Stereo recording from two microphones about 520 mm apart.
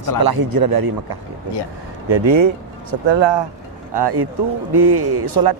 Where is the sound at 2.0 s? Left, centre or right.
Right.